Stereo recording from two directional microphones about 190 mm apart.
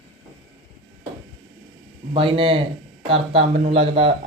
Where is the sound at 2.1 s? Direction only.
30° right (ahead or behind).